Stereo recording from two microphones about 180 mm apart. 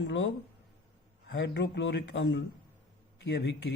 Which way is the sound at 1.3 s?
70° left (ahead or behind).